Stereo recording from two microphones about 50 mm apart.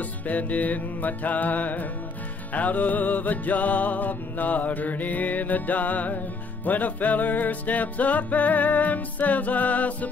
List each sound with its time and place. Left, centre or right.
0.3 s music: left